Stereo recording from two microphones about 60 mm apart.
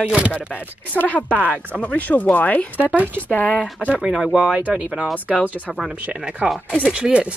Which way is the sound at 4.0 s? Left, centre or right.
Centre.